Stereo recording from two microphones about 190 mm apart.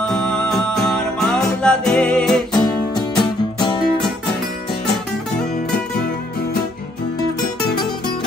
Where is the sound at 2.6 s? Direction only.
20° left (ahead or behind).